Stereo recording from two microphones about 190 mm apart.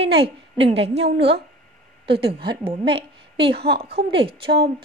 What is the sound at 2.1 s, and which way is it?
Speech, 30° right (ahead or behind).